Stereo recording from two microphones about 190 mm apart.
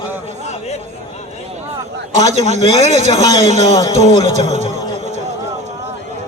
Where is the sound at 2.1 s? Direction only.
35° right (ahead or behind).